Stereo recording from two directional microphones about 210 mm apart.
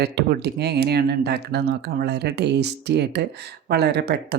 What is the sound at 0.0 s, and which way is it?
Speech, 50° right (ahead or behind).